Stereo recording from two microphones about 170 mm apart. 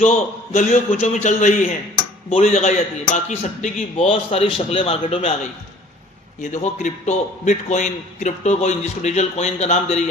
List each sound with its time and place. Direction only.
0.0 s a man's voice: 45° left (ahead or behind)
2.3 s a man's voice: 40° left (ahead or behind)
6.4 s a man's voice: 45° left (ahead or behind)